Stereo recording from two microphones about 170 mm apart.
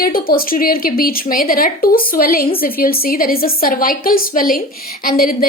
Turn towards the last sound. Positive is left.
turn(degrees=60)  # may be behind; listen again after turning